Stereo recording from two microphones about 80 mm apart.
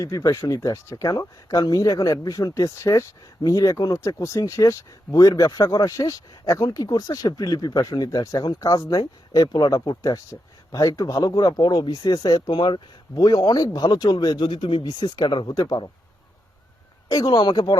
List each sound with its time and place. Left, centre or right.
0.0 s speech: left
11.6 s speech: left
15.6 s speech: left
17.1 s speech: left